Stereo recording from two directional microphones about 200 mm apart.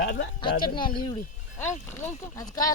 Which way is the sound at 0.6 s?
25° left (ahead or behind).